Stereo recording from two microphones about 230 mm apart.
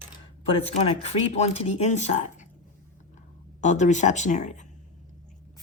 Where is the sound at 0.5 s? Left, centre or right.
Left.